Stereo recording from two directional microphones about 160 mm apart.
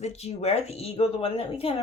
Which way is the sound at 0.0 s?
40° left (ahead or behind).